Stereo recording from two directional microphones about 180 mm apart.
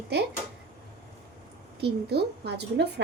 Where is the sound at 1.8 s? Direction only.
65° right (ahead or behind).